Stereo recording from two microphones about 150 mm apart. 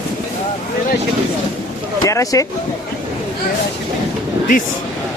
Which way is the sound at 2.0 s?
20° left (ahead or behind).